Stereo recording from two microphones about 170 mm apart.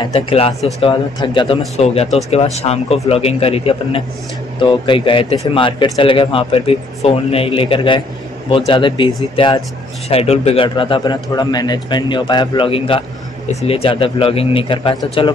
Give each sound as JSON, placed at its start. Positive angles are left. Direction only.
{"t": 0.0, "sound": "a man's voice", "side_deg": 35}